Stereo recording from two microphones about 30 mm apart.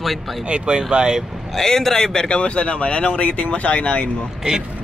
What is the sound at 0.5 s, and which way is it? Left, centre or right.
Speech, right.